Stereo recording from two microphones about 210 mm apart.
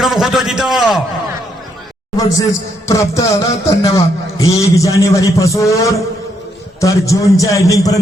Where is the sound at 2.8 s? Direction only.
15° left (ahead or behind).